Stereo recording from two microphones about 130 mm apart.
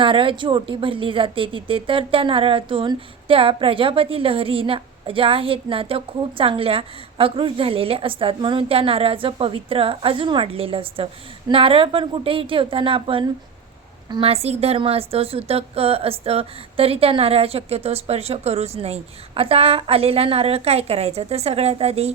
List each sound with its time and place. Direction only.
0.0 s a woman's voice: 40° right (ahead or behind)